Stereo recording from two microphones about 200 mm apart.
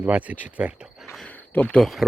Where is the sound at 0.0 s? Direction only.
5° right (ahead or behind).